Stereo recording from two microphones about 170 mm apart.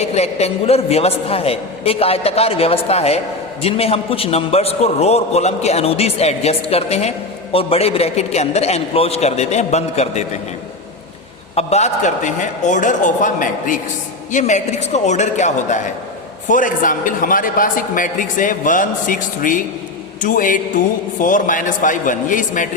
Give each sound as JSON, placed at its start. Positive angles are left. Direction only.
{"t": 0.0, "sound": "a man's voice", "side_deg": 40}
{"t": 11.5, "sound": "a man's voice", "side_deg": 40}